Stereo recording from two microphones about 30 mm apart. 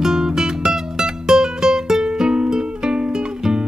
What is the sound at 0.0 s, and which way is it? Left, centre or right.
Music, right.